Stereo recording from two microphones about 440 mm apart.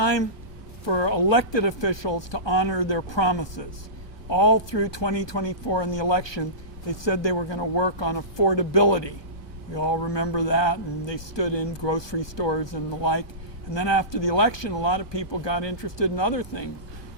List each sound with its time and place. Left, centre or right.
0.0 s speech: left